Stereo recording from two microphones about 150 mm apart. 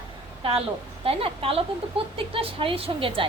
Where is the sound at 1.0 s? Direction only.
40° right (ahead or behind).